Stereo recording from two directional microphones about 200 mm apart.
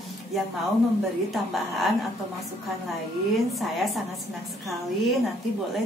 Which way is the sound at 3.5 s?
Centre (ahead or behind).